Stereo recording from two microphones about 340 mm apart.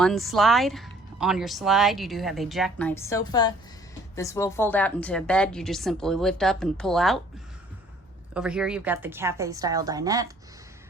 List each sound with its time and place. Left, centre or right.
0.0 s speech: centre
8.3 s a woman's voice: centre